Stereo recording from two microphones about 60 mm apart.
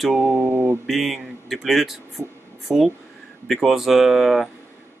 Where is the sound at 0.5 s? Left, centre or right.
Right.